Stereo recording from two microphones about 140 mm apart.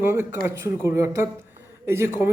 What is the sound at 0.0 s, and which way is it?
A man's voice, 15° right (ahead or behind).